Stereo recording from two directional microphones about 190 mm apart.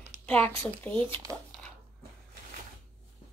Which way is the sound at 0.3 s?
10° left (ahead or behind).